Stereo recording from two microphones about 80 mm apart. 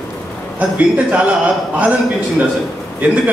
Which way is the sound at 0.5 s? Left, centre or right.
Centre.